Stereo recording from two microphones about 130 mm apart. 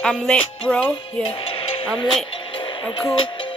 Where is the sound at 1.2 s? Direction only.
45° left (ahead or behind).